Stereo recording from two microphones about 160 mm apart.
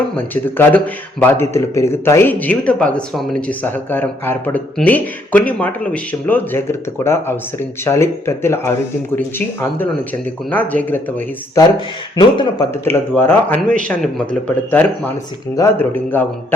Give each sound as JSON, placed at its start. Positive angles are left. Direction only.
{"t": 0.2, "sound": "a man's voice", "side_deg": 10}
{"t": 12.1, "sound": "speech", "side_deg": 30}
{"t": 12.8, "sound": "a man's voice", "side_deg": 15}